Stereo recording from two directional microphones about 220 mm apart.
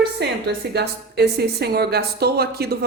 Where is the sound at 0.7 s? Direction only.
50° right (ahead or behind).